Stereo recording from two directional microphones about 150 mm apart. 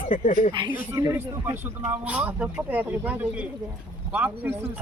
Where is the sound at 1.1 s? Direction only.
15° right (ahead or behind).